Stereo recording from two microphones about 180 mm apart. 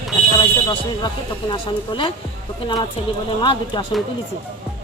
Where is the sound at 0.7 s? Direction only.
25° left (ahead or behind).